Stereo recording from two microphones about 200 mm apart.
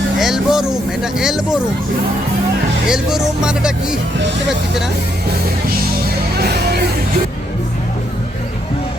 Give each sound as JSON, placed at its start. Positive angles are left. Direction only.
{"t": 0.2, "sound": "vehicle", "side_deg": 0}
{"t": 2.8, "sound": "speech", "side_deg": -5}
{"t": 6.4, "sound": "music", "side_deg": -55}